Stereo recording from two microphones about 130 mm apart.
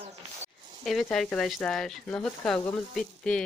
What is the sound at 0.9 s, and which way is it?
Speech, centre (ahead or behind).